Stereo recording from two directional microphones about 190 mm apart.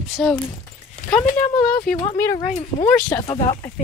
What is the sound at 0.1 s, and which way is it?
Speech, 5° left (ahead or behind).